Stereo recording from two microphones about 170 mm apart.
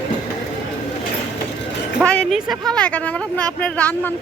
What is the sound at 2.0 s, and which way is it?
Speech, 5° left (ahead or behind).